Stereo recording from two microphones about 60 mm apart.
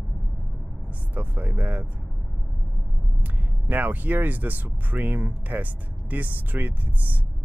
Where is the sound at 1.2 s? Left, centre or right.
Right.